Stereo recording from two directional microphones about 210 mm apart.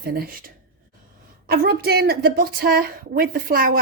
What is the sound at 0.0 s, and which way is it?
A woman's voice, 45° right (ahead or behind).